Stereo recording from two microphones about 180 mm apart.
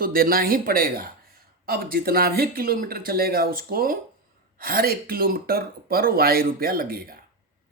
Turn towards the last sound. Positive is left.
turn(degrees=-55)  # may be behind; listen again after turning